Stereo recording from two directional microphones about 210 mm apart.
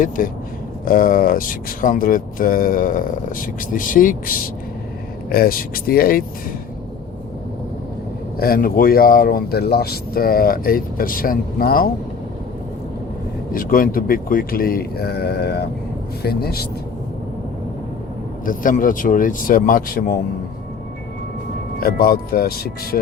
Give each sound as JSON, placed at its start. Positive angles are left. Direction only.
{"t": 0.2, "sound": "speech", "side_deg": 40}
{"t": 8.4, "sound": "speech", "side_deg": 45}
{"t": 13.5, "sound": "speech", "side_deg": 40}
{"t": 18.4, "sound": "speech", "side_deg": 40}
{"t": 21.8, "sound": "speech", "side_deg": 45}